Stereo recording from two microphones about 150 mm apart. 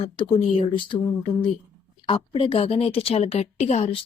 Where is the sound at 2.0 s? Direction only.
35° left (ahead or behind).